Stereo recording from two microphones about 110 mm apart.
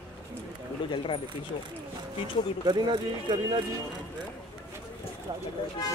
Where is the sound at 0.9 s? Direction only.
55° left (ahead or behind).